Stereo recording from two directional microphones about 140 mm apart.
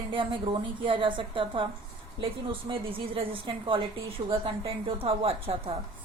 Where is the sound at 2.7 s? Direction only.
40° right (ahead or behind).